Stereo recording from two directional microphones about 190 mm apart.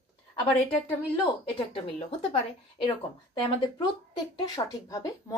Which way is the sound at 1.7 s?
30° left (ahead or behind).